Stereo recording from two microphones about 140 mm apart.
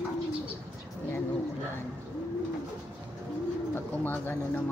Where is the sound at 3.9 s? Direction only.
15° left (ahead or behind).